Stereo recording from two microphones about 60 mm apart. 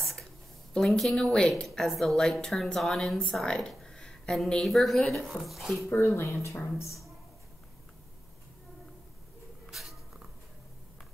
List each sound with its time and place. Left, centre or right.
0.0 s a sound: centre
0.7 s a woman's voice: centre
3.3 s a sound: centre
4.5 s a woman's voice: centre
5.9 s speech: left
9.7 s cat: centre